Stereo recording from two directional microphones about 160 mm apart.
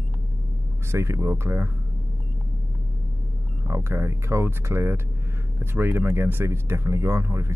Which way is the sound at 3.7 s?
15° right (ahead or behind).